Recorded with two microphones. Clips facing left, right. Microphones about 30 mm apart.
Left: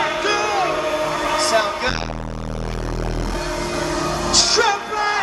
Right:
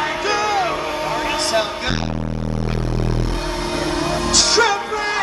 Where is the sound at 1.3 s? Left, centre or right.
Centre.